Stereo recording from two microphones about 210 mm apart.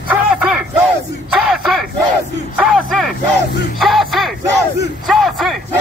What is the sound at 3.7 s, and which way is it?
Music, centre (ahead or behind).